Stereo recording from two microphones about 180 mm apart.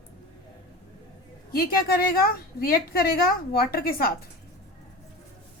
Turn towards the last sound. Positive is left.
turn(degrees=55)  # may be behind; listen again after turning